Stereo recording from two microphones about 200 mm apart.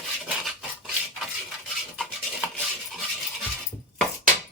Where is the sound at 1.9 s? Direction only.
Centre (ahead or behind).